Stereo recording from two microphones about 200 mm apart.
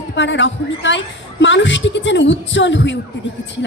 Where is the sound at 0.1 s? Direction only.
65° left (ahead or behind).